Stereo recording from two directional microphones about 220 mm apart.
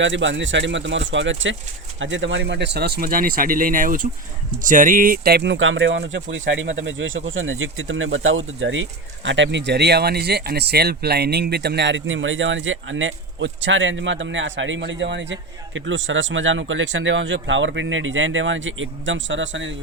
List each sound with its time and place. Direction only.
0.0 s speech: 55° right (ahead or behind)